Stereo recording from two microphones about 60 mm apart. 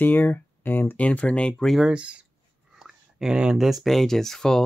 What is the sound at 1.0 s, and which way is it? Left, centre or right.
Speech, left.